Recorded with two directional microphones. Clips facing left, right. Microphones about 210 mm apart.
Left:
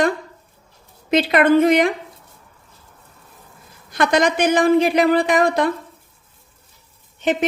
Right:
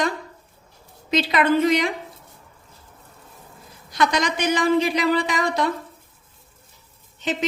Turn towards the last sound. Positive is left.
turn(degrees=55)  # may be behind; listen again after turning